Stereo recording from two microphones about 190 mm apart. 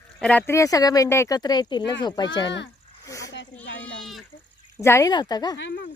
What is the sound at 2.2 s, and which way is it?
Speech, 75° left (ahead or behind).